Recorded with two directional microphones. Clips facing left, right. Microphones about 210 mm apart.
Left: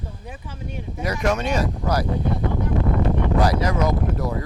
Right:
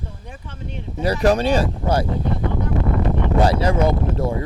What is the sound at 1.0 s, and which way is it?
A man's voice, 30° right (ahead or behind).